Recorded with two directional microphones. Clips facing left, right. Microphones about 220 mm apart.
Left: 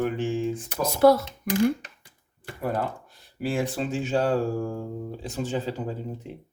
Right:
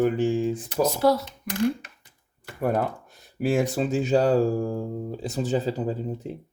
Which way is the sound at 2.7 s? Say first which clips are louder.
Right 3 dB; 45° right (ahead or behind).